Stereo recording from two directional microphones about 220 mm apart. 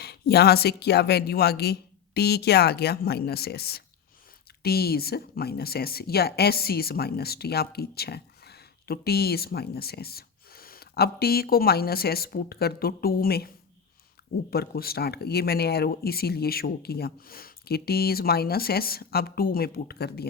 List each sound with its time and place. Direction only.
0.0 s speech: 45° left (ahead or behind)
14.5 s speech: 45° left (ahead or behind)